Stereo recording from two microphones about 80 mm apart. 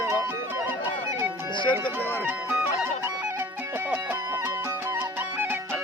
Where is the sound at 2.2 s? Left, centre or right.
Right.